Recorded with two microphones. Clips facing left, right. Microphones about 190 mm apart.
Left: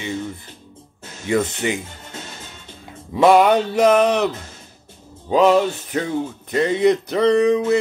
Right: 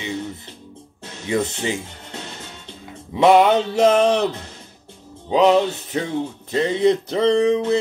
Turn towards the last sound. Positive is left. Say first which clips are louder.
# left 1 dB
turn(degrees=-25)  # may be behind; listen again after turning